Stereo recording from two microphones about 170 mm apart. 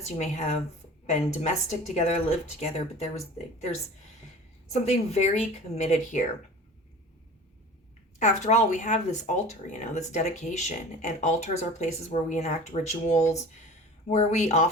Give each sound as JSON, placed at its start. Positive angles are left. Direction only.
{"t": 0.0, "sound": "speech", "side_deg": 40}
{"t": 4.9, "sound": "speech", "side_deg": 40}
{"t": 8.2, "sound": "speech", "side_deg": 40}